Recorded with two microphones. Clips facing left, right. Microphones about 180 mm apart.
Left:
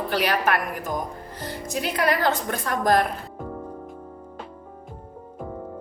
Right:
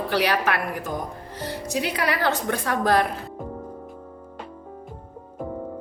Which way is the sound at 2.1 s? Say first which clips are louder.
Left 1 dB; 65° right (ahead or behind).